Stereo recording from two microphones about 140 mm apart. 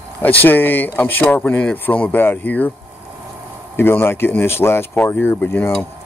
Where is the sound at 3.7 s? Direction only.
15° left (ahead or behind).